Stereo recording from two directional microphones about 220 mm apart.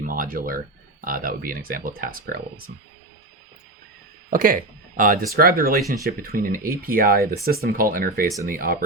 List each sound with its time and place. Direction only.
0.0 s speech: 40° right (ahead or behind)
4.3 s speech: 40° right (ahead or behind)